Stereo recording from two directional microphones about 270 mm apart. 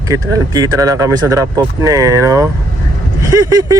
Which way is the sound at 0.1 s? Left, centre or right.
Centre.